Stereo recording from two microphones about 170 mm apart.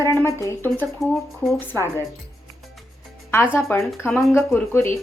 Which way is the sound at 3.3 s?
15° left (ahead or behind).